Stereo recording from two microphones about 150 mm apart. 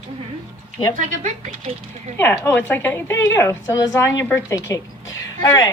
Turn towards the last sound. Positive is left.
turn(degrees=25)  # may be behind; listen again after turning